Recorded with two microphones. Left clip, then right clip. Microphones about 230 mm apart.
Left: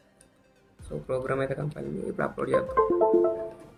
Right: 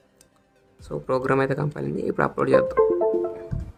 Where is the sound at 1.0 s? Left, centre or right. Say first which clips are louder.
Right 7 dB; right.